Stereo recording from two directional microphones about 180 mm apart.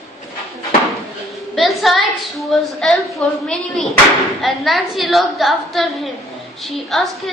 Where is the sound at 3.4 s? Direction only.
5° left (ahead or behind).